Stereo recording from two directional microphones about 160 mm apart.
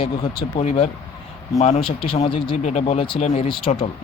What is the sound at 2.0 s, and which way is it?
Speech, 35° left (ahead or behind).